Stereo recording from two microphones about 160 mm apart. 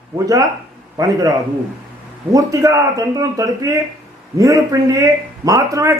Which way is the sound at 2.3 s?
20° right (ahead or behind).